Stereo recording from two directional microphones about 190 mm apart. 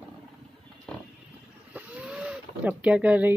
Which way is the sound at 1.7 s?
5° right (ahead or behind).